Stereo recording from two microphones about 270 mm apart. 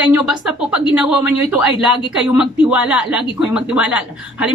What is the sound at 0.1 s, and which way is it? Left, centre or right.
A woman's voice, centre.